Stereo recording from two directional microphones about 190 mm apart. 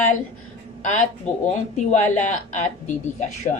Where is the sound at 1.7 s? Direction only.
40° left (ahead or behind).